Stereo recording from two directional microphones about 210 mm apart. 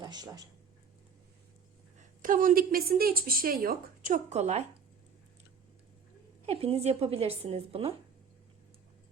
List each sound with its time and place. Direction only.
0.0 s speech: 20° right (ahead or behind)
2.0 s a woman's voice: 40° right (ahead or behind)
6.4 s speech: 30° right (ahead or behind)